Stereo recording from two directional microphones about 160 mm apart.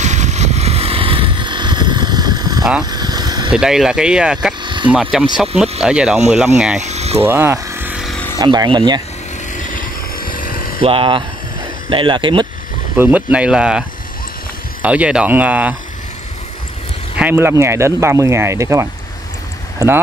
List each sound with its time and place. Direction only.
0.0 s a sound: 45° right (ahead or behind); by 2.6 s 25° right (ahead or behind)
2.8 s vehicle: 25° right (ahead or behind)
3.5 s speech: 5° right (ahead or behind)
4.6 s a sound: 30° right (ahead or behind)
4.9 s speech: 5° right (ahead or behind)
6.8 s a sound: 45° right (ahead or behind)
7.2 s a sound: 15° right (ahead or behind)
8.4 s speech: 25° right (ahead or behind)
9.5 s vehicle: 55° left (ahead or behind)
10.8 s speech: 35° right (ahead or behind)
12.9 s speech: 10° right (ahead or behind)
17.2 s speech: 15° right (ahead or behind)